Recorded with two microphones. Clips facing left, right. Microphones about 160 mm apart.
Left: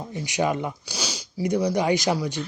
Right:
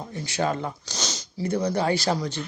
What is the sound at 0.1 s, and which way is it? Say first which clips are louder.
Speech: left 2 dB; 15° left (ahead or behind).